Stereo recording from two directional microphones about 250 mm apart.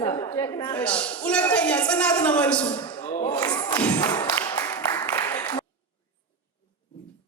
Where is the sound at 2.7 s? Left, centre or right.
Centre.